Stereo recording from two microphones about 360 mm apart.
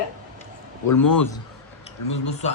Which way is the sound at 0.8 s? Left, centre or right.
Left.